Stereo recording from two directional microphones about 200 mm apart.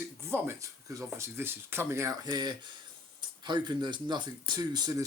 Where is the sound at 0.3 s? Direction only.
10° right (ahead or behind).